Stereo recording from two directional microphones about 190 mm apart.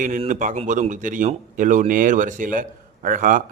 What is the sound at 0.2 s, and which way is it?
Speech, 40° right (ahead or behind).